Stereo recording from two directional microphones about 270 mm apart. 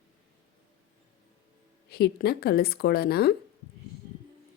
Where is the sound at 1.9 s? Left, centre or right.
Left.